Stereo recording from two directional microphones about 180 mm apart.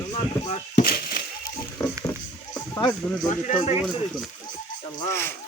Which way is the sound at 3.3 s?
40° left (ahead or behind).